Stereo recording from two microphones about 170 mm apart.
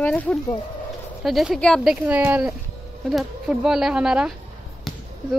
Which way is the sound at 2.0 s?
10° right (ahead or behind).